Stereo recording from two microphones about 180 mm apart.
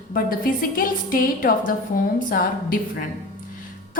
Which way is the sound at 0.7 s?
50° left (ahead or behind).